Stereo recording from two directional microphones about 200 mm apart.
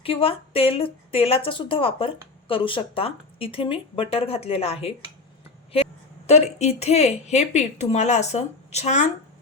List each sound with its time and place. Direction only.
0.0 s a woman's voice: 30° left (ahead or behind)